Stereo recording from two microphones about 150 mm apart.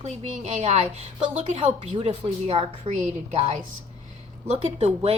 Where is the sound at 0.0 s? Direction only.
45° right (ahead or behind).